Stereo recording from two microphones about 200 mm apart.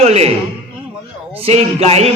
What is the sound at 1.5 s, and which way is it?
Speech, 30° right (ahead or behind).